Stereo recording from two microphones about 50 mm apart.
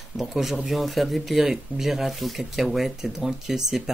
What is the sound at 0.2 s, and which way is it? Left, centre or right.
Speech, centre.